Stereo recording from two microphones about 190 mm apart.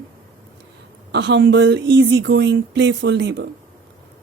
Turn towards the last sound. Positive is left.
turn(degrees=-65)  # may be behind; listen again after turning